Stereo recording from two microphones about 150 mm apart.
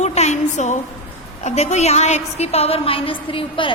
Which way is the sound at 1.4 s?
45° left (ahead or behind).